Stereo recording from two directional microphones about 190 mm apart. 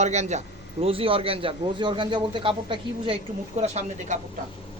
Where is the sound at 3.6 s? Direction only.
35° right (ahead or behind).